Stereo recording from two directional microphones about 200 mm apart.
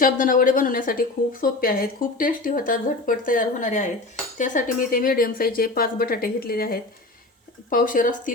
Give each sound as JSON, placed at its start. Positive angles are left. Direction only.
{"t": 0.0, "sound": "speech", "side_deg": 40}